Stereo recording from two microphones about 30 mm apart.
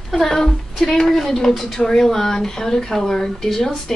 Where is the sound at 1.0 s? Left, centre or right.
Centre.